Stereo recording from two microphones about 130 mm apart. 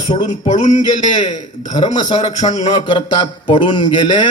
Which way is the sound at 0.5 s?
65° left (ahead or behind).